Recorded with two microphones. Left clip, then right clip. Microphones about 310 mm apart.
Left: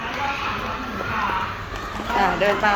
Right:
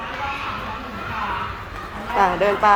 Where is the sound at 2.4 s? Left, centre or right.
Centre.